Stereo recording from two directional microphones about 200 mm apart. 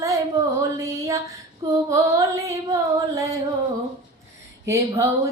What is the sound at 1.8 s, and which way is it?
Carnatic music, 15° right (ahead or behind).